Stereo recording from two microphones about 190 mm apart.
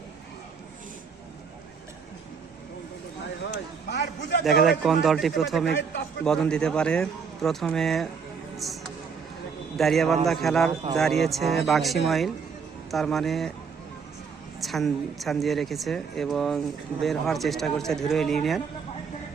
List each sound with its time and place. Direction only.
3.8 s a man's voice: 65° left (ahead or behind)
4.4 s a woman's voice: centre (ahead or behind)
14.6 s a woman's voice: centre (ahead or behind)